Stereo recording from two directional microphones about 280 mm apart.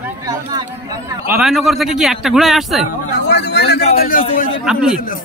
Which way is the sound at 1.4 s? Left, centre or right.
Centre.